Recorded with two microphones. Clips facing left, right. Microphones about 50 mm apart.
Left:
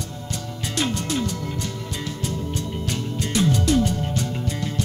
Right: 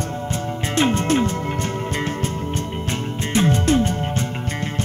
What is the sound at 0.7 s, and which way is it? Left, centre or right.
Music, right.